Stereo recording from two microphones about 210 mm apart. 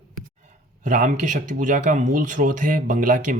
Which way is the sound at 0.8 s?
35° right (ahead or behind).